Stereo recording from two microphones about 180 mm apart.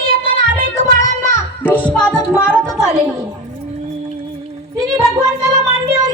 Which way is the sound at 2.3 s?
5° right (ahead or behind).